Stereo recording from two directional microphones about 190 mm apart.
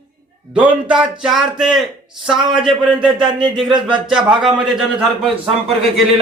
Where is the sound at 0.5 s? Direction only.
5° right (ahead or behind).